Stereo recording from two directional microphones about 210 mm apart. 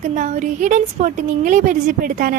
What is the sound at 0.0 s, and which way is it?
Speech, 35° right (ahead or behind).